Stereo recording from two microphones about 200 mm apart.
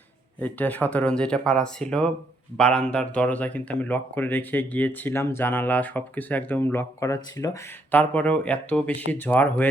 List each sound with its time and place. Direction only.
0.3 s speech: 10° left (ahead or behind)